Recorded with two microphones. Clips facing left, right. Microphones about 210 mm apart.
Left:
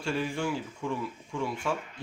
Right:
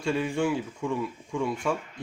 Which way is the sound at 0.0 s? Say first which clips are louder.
Right 4 dB; 20° right (ahead or behind).